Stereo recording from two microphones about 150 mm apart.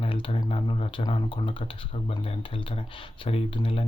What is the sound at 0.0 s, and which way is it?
Speech, 35° left (ahead or behind).